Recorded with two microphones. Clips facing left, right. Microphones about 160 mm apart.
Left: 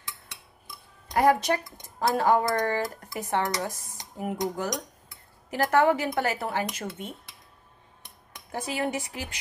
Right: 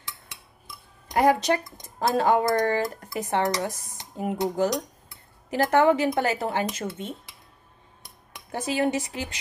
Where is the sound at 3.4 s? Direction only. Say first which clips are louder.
Right 4 dB; 30° right (ahead or behind).